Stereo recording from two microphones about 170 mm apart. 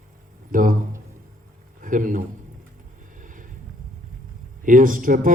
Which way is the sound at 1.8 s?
50° right (ahead or behind).